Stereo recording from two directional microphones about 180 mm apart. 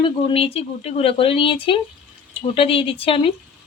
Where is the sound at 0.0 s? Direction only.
30° left (ahead or behind).